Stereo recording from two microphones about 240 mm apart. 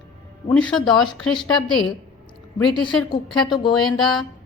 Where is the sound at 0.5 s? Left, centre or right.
Centre.